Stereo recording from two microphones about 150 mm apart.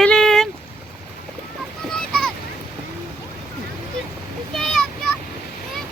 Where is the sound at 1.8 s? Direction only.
5° left (ahead or behind).